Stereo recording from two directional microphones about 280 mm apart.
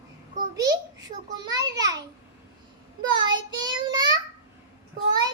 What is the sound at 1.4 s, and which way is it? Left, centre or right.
Speech, centre.